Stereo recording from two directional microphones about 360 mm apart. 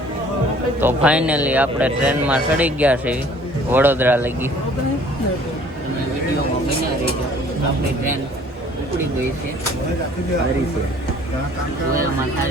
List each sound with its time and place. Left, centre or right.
0.8 s a man's voice: centre